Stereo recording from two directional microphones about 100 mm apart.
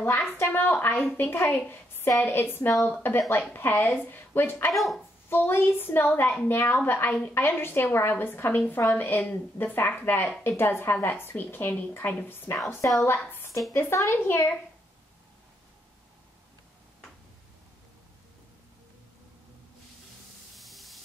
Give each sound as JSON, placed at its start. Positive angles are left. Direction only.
{"t": 0.3, "sound": "a woman's voice", "side_deg": 20}
{"t": 4.7, "sound": "speech", "side_deg": 0}
{"t": 5.3, "sound": "a woman's voice", "side_deg": 20}
{"t": 20.5, "sound": "spray", "side_deg": 0}